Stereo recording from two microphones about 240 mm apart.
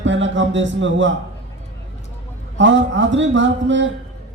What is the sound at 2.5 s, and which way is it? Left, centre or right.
A man's voice, right.